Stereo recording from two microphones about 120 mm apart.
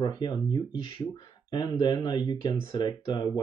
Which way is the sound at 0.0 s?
40° left (ahead or behind).